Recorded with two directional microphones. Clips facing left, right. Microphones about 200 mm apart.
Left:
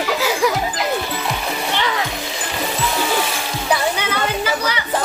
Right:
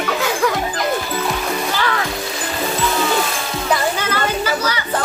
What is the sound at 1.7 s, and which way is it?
Music, 20° left (ahead or behind).